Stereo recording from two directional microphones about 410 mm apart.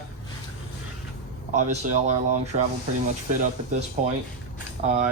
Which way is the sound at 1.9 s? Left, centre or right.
Centre.